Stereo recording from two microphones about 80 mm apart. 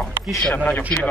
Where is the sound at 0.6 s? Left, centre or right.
Left.